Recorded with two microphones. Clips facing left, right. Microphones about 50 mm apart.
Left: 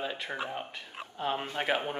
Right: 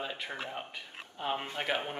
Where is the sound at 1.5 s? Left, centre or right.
Centre.